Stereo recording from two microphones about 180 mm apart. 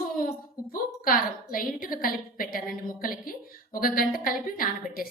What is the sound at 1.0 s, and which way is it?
A woman's voice, 50° left (ahead or behind).